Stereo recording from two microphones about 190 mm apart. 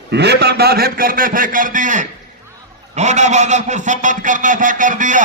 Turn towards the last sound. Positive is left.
turn(degrees=-45)  # may be behind; listen again after turning